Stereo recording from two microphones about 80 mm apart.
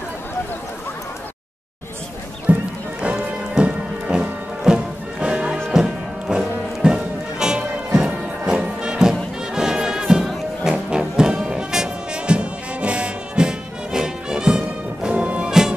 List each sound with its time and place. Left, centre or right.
2.5 s music: right